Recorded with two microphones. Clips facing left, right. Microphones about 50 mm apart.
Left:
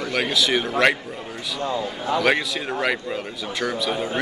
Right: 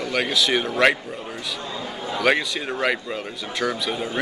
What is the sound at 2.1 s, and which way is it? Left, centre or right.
A man's voice, centre.